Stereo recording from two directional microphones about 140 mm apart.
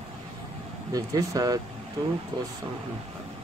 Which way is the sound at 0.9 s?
25° right (ahead or behind).